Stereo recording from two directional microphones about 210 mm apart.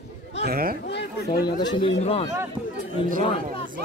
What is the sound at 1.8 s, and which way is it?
Speech, 25° left (ahead or behind).